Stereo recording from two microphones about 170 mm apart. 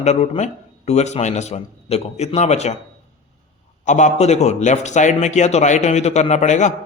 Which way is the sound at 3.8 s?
45° left (ahead or behind).